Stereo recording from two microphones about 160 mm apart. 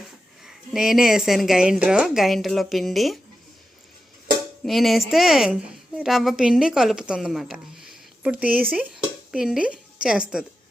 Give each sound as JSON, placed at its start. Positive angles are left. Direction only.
{"t": 0.4, "sound": "a woman's voice", "side_deg": 0}
{"t": 4.6, "sound": "a woman's voice", "side_deg": 0}